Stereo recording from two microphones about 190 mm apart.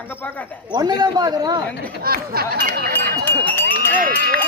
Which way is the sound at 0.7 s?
20° right (ahead or behind).